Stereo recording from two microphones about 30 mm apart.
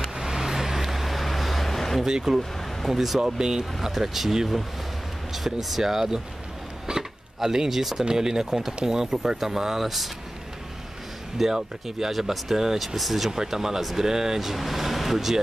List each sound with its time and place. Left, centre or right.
0.0 s vehicle: centre
2.0 s speech: centre
2.3 s speech: centre
3.3 s speech: right
3.8 s speech: centre
6.9 s speech: right
9.8 s speech: centre
11.4 s speech: centre
12.7 s speech: centre
13.3 s speech: centre